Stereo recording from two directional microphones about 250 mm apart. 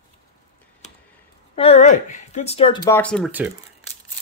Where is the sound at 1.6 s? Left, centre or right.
Left; by 3.5 s centre.